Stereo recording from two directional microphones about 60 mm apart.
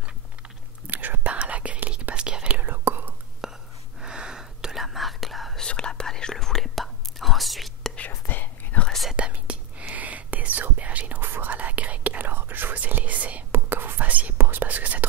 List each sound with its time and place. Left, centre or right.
0.8 s whispering: right
2.6 s whispering: right
3.4 s whispering: centre
5.6 s whispering: centre
8.1 s whispering: left
8.7 s whispering: left
9.1 s whispering: centre
13.5 s whispering: right